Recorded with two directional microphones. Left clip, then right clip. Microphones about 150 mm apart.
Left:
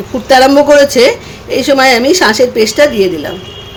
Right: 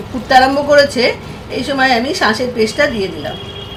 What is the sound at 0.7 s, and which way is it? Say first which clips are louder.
Speech: left 5 dB; 90° left.